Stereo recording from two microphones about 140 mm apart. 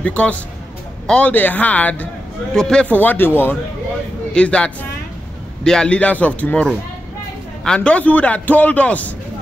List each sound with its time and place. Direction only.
0.0 s a man's voice: 10° left (ahead or behind)